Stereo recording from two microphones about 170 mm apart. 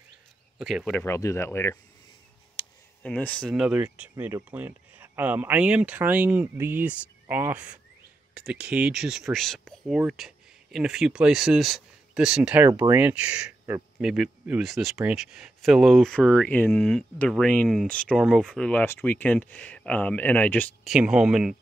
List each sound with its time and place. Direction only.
0.6 s speech: centre (ahead or behind)
1.0 s speech: 15° left (ahead or behind)
2.6 s a sound: 30° left (ahead or behind)
3.0 s speech: 10° left (ahead or behind)
20.8 s speech: 5° right (ahead or behind)